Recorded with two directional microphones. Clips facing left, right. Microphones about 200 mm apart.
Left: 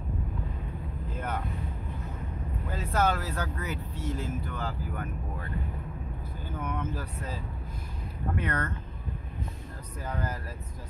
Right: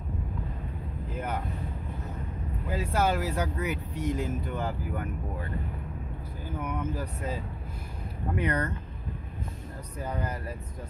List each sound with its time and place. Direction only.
2.7 s speech: 10° right (ahead or behind)
6.6 s speech: 10° right (ahead or behind)
8.4 s speech: 15° right (ahead or behind)